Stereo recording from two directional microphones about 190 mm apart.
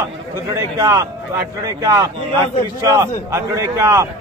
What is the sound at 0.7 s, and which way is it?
A man's voice, 20° right (ahead or behind).